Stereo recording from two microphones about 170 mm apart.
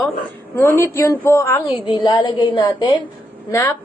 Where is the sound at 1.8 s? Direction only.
25° left (ahead or behind).